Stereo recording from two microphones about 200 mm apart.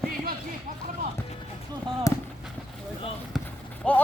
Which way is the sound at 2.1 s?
15° left (ahead or behind).